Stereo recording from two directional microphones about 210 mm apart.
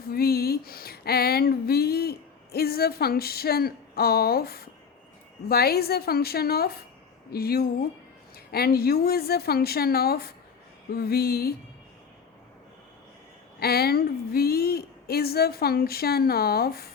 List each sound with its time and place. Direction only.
0.1 s a sound: 45° left (ahead or behind)
5.5 s a woman's voice: 50° left (ahead or behind)
13.6 s a woman's voice: 50° left (ahead or behind)